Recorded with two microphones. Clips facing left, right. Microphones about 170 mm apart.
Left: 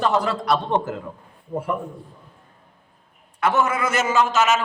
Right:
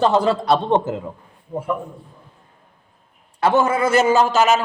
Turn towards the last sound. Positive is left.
turn(degrees=-35)  # may be behind; listen again after turning